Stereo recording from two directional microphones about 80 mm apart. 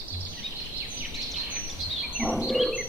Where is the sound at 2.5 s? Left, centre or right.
Centre.